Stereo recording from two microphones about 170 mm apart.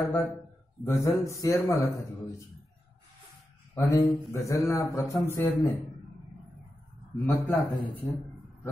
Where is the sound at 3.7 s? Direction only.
20° left (ahead or behind).